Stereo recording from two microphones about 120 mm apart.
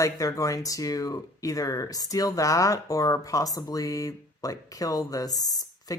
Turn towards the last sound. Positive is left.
turn(degrees=35)  # may be behind; listen again after turning